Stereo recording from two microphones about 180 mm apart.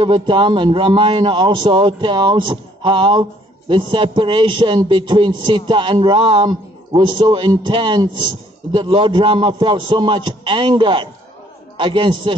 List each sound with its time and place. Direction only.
0.0 s a man's voice: 25° right (ahead or behind)